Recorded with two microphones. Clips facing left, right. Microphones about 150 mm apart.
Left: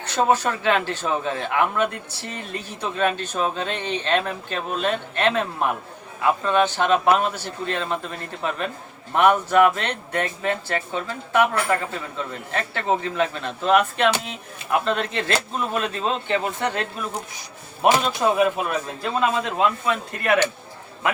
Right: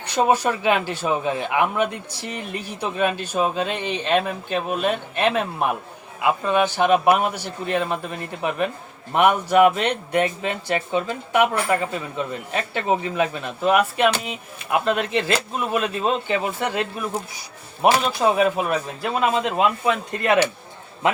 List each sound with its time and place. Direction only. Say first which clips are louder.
0.0 s speech: right 1 dB; 15° right (ahead or behind)
18.2 s speech: right 2 dB; 15° right (ahead or behind)